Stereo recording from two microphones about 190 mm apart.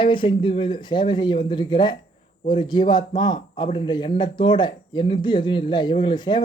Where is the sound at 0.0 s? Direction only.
25° left (ahead or behind).